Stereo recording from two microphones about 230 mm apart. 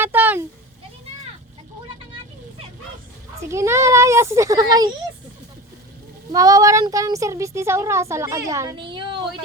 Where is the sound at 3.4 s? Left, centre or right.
Centre.